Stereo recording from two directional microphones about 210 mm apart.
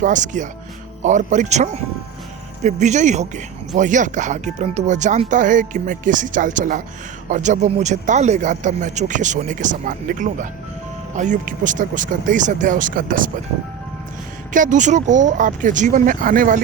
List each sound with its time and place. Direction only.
0.0 s speech: 35° right (ahead or behind)
14.5 s speech: 35° right (ahead or behind)